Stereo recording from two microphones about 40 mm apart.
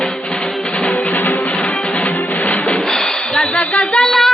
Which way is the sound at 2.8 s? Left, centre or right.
Centre.